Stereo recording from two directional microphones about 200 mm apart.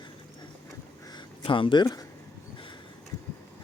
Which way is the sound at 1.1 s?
25° left (ahead or behind).